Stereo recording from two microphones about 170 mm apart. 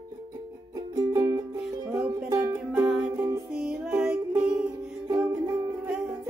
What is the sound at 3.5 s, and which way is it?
Music, 5° right (ahead or behind).